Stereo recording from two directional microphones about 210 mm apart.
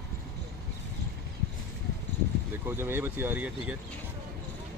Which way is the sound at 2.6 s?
10° right (ahead or behind).